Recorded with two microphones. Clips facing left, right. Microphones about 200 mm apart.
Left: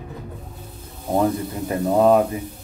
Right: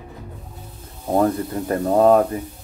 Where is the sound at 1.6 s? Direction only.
10° left (ahead or behind).